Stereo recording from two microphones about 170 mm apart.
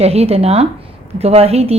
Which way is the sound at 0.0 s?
35° right (ahead or behind).